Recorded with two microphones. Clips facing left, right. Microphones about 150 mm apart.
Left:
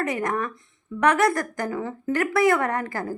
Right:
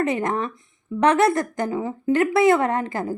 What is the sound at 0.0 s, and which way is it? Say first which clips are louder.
A woman's voice: right 3 dB; 25° right (ahead or behind).